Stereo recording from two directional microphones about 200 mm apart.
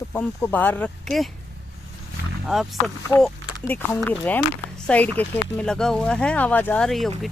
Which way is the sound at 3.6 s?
10° left (ahead or behind).